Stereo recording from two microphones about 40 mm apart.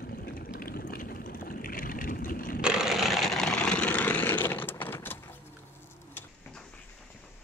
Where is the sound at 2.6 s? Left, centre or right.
Right.